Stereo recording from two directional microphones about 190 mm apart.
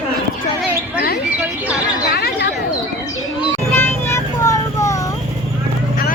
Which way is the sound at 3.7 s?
15° left (ahead or behind).